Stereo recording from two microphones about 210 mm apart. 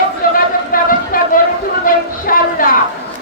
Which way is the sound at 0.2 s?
40° left (ahead or behind).